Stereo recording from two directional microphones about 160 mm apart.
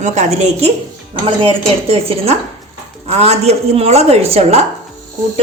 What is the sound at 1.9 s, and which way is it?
A woman's voice, 40° right (ahead or behind).